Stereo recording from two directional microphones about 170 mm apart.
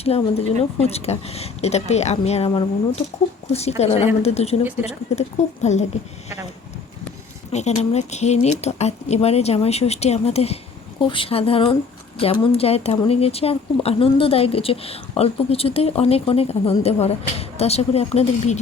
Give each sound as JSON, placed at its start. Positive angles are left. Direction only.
{"t": 0.0, "sound": "speech", "side_deg": 35}
{"t": 5.7, "sound": "speech", "side_deg": 40}
{"t": 7.5, "sound": "speech", "side_deg": 40}